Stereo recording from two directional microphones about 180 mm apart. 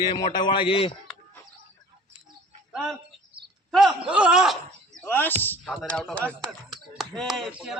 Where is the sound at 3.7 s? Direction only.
Centre (ahead or behind).